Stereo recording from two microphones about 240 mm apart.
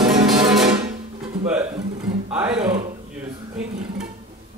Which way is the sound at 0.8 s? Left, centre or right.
Right.